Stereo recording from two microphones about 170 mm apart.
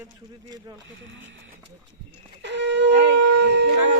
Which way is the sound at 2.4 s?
90° right.